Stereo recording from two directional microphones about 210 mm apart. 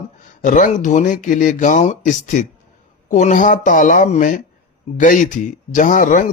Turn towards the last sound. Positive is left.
turn(degrees=35)  # may be behind; listen again after turning